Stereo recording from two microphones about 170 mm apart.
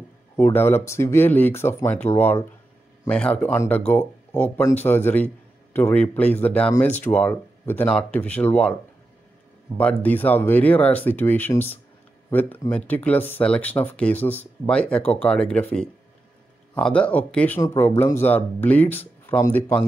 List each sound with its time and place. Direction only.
0.4 s speech: 15° left (ahead or behind)
9.8 s speech: 10° left (ahead or behind)